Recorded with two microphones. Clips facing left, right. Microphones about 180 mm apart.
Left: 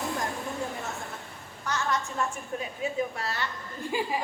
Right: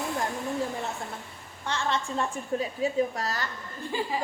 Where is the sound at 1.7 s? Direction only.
30° right (ahead or behind).